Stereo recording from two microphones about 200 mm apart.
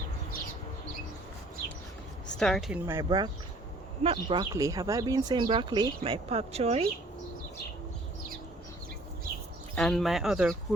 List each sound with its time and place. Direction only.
2.4 s speech: centre (ahead or behind)
2.8 s speech: 15° right (ahead or behind); by 6.8 s 30° right (ahead or behind)
9.7 s speech: 5° left (ahead or behind)